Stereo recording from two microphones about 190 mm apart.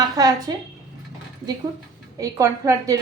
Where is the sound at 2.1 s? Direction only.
15° right (ahead or behind).